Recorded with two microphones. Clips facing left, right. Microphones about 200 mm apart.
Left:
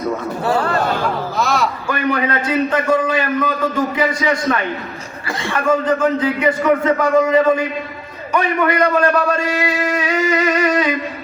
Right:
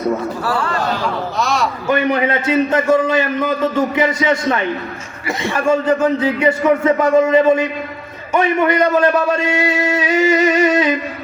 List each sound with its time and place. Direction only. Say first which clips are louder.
1.4 s a man's voice: even; centre (ahead or behind)
1.9 s a man's voice: right 5 dB; 25° right (ahead or behind)